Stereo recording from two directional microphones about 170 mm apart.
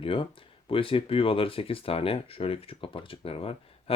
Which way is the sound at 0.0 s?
30° left (ahead or behind).